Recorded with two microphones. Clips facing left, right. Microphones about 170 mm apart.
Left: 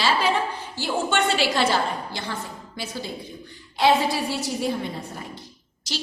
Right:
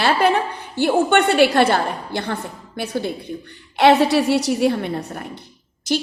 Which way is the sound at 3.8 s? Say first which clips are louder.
Right 6 dB; 70° right (ahead or behind).